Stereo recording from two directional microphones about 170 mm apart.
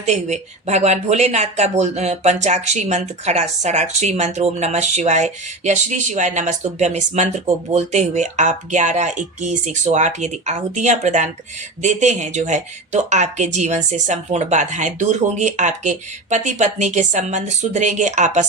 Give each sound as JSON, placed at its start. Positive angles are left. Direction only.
{"t": 0.0, "sound": "speech", "side_deg": -40}